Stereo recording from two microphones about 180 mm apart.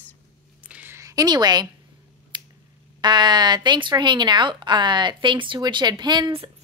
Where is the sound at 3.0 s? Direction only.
25° right (ahead or behind).